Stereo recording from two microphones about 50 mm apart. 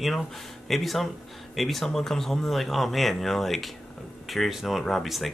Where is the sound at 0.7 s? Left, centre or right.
Centre.